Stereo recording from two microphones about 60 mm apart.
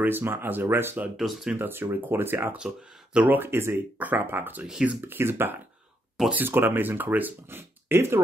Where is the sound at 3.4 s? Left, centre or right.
Right.